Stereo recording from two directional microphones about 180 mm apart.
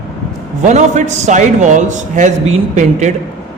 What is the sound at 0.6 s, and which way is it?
A man's voice, 40° right (ahead or behind).